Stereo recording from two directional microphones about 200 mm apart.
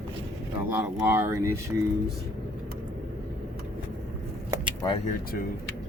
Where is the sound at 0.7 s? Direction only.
10° right (ahead or behind).